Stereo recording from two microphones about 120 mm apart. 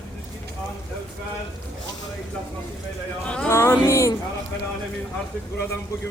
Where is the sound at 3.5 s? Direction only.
25° left (ahead or behind).